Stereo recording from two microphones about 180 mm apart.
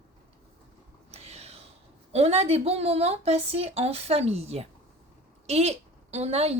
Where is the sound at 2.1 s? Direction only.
35° right (ahead or behind).